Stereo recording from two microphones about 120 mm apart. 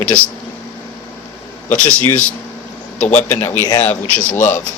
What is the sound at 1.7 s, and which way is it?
A man's voice, 10° left (ahead or behind).